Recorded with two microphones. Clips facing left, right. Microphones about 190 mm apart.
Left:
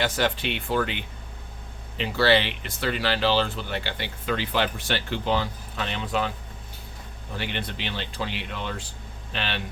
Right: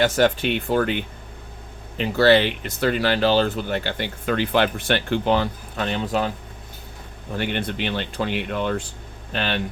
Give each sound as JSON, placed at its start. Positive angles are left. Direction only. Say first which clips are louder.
{"t": 0.0, "sound": "speech", "louder": "right 7 dB", "side_deg": -45}
{"t": 7.3, "sound": "speech", "louder": "right 7 dB", "side_deg": -50}